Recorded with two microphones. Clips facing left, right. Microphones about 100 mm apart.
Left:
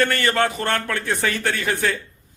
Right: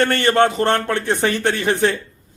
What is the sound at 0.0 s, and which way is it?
Speech, 30° right (ahead or behind).